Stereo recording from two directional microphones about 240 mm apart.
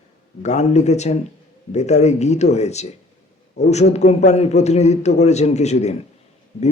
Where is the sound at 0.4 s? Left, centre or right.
Left.